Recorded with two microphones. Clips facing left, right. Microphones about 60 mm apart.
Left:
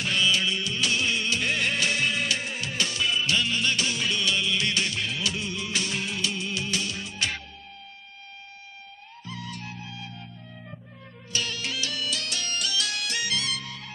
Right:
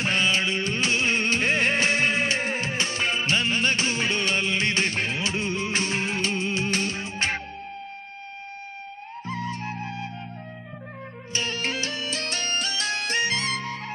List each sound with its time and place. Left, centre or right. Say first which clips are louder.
0.0 s music: right 2 dB; right
9.2 s music: right 7 dB; right
11.3 s music: right 3 dB; right